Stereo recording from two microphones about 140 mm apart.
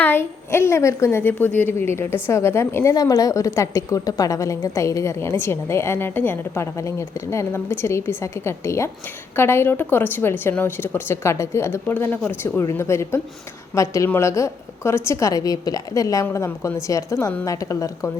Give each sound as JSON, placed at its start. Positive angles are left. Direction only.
{"t": 0.0, "sound": "a woman's voice", "side_deg": 15}